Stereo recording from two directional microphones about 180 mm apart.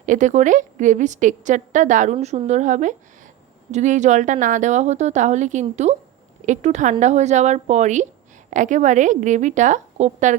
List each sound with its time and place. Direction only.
0.0 s a woman's voice: 45° right (ahead or behind)
2.1 s a woman's voice: 35° right (ahead or behind)